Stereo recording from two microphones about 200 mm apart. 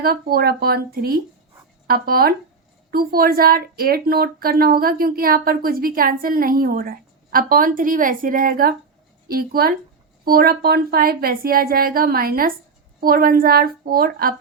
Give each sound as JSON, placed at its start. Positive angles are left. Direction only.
{"t": 0.0, "sound": "speech", "side_deg": -50}